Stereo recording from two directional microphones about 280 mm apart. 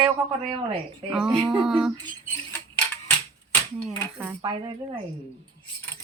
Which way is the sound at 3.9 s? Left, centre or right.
Centre.